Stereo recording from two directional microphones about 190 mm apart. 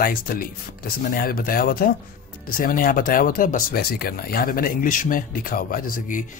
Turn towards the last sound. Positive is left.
turn(degrees=45)  # may be behind; listen again after turning